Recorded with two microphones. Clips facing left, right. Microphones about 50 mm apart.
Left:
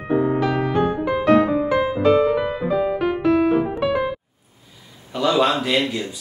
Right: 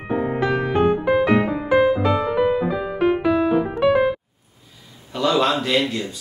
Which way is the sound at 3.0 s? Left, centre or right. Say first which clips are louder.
Right 3 dB; centre.